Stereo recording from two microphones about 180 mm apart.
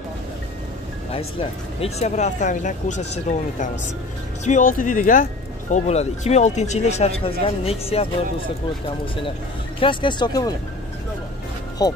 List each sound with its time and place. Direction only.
1.8 s speech: 40° left (ahead or behind); by 10.5 s 25° left (ahead or behind)
11.8 s speech: 20° left (ahead or behind)